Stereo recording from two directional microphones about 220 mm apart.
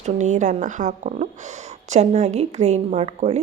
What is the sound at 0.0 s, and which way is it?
A woman's voice, 35° right (ahead or behind).